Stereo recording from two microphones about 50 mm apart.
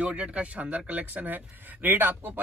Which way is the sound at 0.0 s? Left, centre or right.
Right.